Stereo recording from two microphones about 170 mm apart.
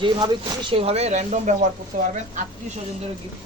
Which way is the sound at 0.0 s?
25° right (ahead or behind).